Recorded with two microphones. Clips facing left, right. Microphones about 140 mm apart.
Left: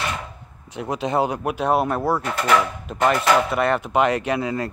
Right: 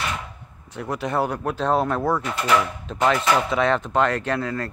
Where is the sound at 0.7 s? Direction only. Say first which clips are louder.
Left 2 dB; 15° left (ahead or behind).